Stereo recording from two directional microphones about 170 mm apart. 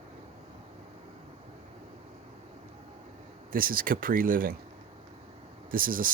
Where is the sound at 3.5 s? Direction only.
55° right (ahead or behind).